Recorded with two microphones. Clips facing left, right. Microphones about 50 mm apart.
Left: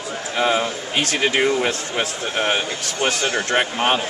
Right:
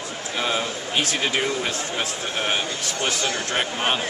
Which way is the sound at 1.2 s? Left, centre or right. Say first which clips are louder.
Left 6 dB; left.